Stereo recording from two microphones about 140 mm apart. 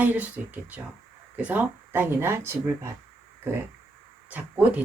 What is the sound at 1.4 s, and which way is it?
Speech, 10° right (ahead or behind).